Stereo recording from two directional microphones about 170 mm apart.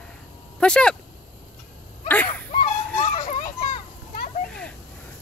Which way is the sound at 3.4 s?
50° left (ahead or behind).